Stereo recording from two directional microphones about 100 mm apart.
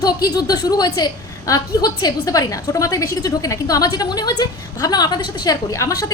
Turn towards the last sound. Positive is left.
turn(degrees=35)  # may be behind; listen again after turning